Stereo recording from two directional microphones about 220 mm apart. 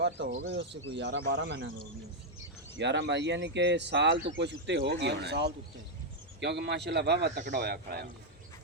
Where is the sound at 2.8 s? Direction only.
55° right (ahead or behind).